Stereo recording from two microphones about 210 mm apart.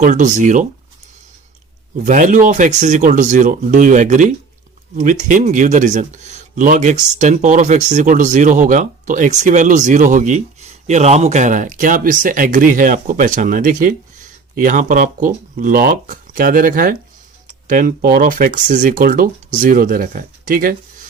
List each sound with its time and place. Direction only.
0.0 s speech: 35° right (ahead or behind)
2.0 s speech: 35° right (ahead or behind)